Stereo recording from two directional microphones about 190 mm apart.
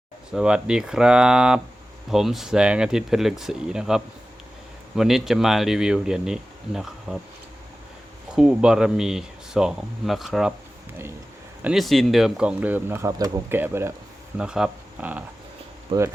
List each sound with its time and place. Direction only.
0.3 s speech: 5° right (ahead or behind)
8.4 s speech: 5° right (ahead or behind)
11.6 s speech: centre (ahead or behind)
15.9 s speech: 25° right (ahead or behind)